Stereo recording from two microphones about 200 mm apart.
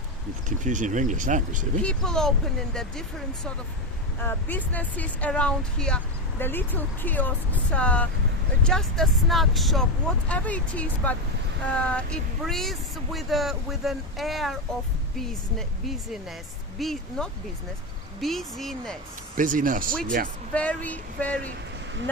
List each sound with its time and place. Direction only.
0.4 s speech: 40° right (ahead or behind)
1.8 s speech: 5° left (ahead or behind)
4.2 s speech: 10° left (ahead or behind)
19.4 s speech: 40° right (ahead or behind)
20.5 s speech: 5° left (ahead or behind)